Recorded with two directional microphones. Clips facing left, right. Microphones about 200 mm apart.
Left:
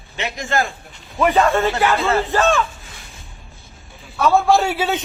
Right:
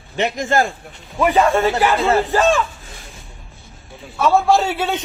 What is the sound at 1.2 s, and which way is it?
Speech, 5° right (ahead or behind).